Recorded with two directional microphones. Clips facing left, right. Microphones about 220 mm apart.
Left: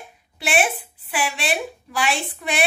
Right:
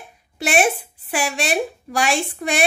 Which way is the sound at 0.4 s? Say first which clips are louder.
Right 3 dB; 45° right (ahead or behind).